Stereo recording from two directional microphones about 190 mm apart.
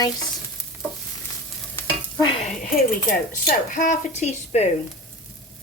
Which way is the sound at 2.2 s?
25° left (ahead or behind).